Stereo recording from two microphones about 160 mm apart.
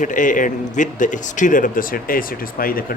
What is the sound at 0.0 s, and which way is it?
Speech, 55° left (ahead or behind).